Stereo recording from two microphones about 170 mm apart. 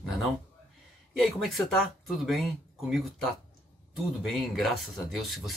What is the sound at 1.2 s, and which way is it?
Speech, centre (ahead or behind).